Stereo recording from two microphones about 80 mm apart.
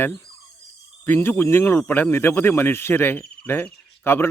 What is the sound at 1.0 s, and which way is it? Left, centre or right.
Speech, left.